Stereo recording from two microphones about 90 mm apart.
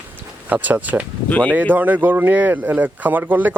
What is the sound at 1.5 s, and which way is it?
Speech, 20° right (ahead or behind).